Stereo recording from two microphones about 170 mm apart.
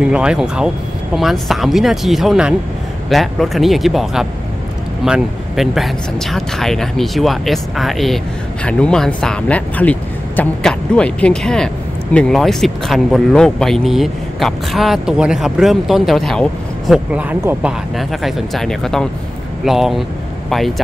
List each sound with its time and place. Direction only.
0.1 s speech: 5° right (ahead or behind)